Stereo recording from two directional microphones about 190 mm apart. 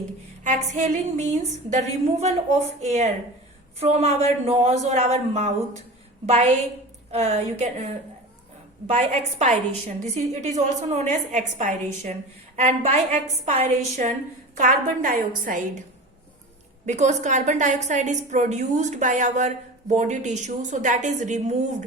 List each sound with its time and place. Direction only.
0.4 s a woman's voice: 40° right (ahead or behind)
8.9 s a woman's voice: 35° right (ahead or behind)
16.8 s a woman's voice: 40° right (ahead or behind)